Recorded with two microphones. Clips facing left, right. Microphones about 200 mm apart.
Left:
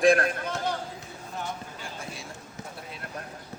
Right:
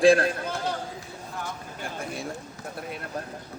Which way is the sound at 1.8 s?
55° right (ahead or behind).